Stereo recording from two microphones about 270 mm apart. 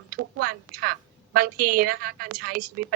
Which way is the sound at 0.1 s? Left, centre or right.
Right.